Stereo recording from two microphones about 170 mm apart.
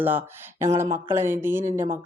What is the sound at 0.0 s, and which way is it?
Speech, 10° right (ahead or behind).